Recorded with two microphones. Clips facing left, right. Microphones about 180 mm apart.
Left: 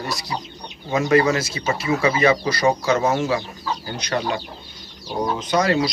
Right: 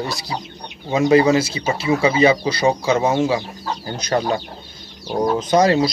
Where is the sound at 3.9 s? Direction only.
45° right (ahead or behind).